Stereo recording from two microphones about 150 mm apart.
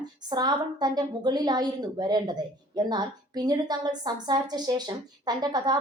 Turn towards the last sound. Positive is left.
turn(degrees=-25)  # may be behind; listen again after turning